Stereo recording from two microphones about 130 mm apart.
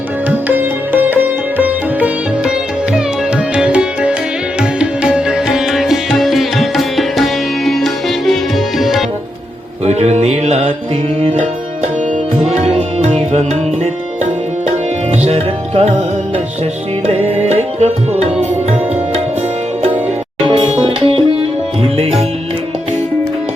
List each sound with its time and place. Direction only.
0.3 s sitar: 15° right (ahead or behind)
2.9 s music: 5° right (ahead or behind)
9.8 s music: 55° right (ahead or behind)
15.2 s music: 50° right (ahead or behind)
17.1 s tabla: 55° right (ahead or behind)
20.4 s sitar: 40° right (ahead or behind)
21.9 s music: 50° right (ahead or behind)